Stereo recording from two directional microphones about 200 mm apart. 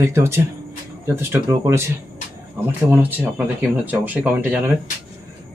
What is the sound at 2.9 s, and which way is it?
Speech, 10° right (ahead or behind).